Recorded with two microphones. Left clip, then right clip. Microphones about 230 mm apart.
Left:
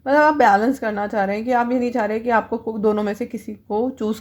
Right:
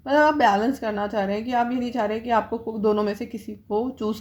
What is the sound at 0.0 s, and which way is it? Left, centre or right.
A woman's voice, left.